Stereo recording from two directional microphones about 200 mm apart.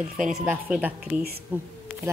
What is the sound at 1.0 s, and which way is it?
Speech, 50° right (ahead or behind).